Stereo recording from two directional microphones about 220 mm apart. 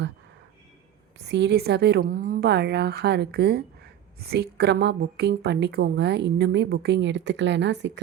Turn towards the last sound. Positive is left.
turn(degrees=-55)  # may be behind; listen again after turning